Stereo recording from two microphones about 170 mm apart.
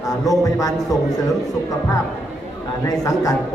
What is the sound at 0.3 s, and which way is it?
Speech, 20° left (ahead or behind).